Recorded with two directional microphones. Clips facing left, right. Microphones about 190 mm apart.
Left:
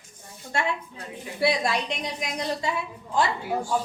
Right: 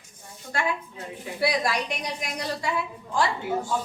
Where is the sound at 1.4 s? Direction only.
25° left (ahead or behind).